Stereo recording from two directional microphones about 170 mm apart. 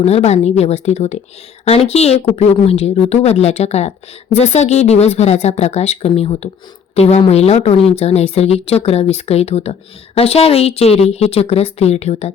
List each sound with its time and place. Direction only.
0.0 s a woman's voice: 40° left (ahead or behind)